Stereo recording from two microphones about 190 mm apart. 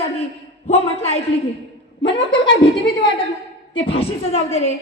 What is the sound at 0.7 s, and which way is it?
A woman's voice, 35° left (ahead or behind).